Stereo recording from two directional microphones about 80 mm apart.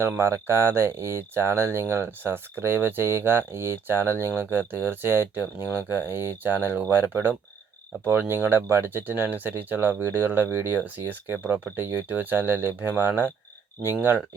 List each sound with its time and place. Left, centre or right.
0.0 s speech: right